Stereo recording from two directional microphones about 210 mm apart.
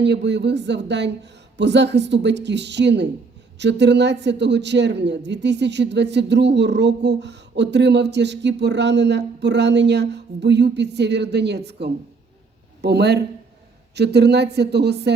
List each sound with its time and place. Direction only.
0.0 s a man's voice: 55° right (ahead or behind)